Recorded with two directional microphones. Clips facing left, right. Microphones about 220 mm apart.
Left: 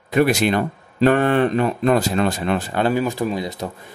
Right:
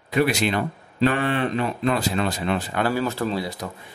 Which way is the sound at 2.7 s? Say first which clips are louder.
Left 5 dB; 20° left (ahead or behind).